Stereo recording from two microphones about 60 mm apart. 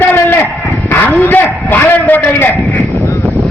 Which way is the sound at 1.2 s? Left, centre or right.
Left.